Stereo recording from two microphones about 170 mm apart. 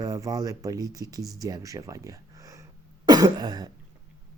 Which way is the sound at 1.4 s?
20° right (ahead or behind).